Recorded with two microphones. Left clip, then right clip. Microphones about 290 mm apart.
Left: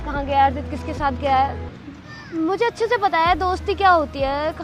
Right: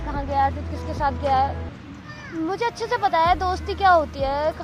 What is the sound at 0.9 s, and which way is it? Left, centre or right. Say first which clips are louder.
Speech: left 2 dB; left.